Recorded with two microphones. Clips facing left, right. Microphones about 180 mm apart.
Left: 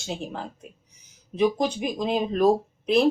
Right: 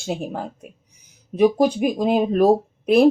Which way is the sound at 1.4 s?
55° right (ahead or behind).